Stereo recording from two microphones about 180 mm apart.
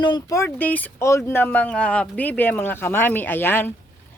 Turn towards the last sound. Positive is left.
turn(degrees=10)  # may be behind; listen again after turning